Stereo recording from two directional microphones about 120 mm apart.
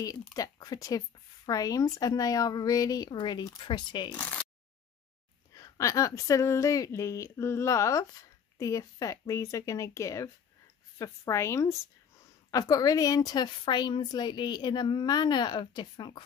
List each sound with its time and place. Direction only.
0.3 s speech: 30° left (ahead or behind)
4.1 s speech: 15° left (ahead or behind)
5.6 s a woman's voice: 25° left (ahead or behind)